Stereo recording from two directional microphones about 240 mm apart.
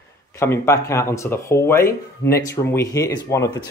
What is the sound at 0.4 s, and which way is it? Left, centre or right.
Speech, centre.